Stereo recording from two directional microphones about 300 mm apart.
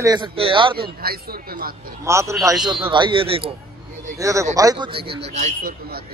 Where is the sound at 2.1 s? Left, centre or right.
Centre.